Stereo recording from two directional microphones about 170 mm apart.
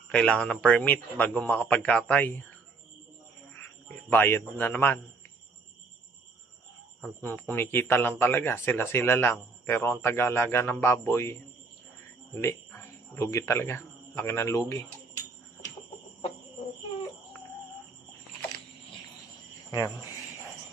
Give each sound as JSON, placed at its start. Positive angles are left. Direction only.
{"t": 0.1, "sound": "speech", "side_deg": 5}
{"t": 3.6, "sound": "a man's voice", "side_deg": 10}
{"t": 7.0, "sound": "speech", "side_deg": 10}
{"t": 12.4, "sound": "speech", "side_deg": 15}
{"t": 19.7, "sound": "speech", "side_deg": 20}